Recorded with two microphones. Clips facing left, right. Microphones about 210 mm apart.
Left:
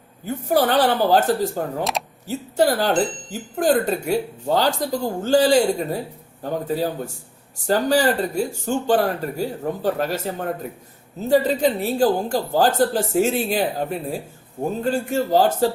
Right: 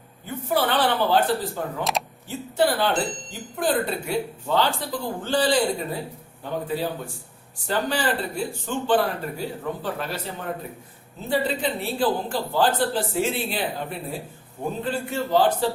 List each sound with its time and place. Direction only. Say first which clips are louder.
0.3 s speech: left 5 dB; 40° left (ahead or behind)
1.8 s speech: left 2 dB; centre (ahead or behind)
2.2 s speech: left 4 dB; 40° left (ahead or behind)